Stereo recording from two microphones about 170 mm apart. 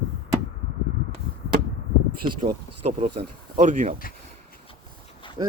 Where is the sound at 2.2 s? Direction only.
60° right (ahead or behind).